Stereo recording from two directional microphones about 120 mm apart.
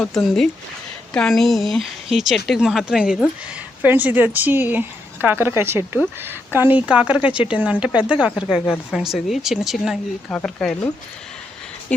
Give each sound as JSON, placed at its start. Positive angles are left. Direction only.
{"t": 0.1, "sound": "a woman's voice", "side_deg": 0}
{"t": 11.9, "sound": "speech", "side_deg": 10}